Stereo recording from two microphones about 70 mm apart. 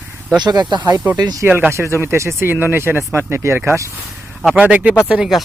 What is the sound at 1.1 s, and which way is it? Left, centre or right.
Speech, right.